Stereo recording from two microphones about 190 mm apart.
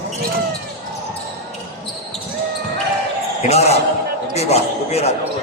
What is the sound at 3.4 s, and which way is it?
A man's voice, 35° left (ahead or behind).